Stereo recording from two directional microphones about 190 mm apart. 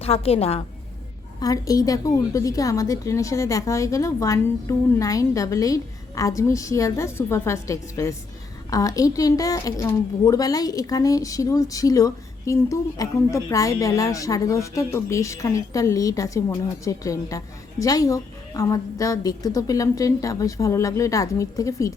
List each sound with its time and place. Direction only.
0.0 s a woman's voice: 30° left (ahead or behind)
1.4 s a woman's voice: 20° left (ahead or behind)